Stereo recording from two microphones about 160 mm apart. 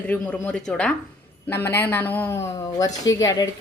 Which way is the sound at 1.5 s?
15° left (ahead or behind).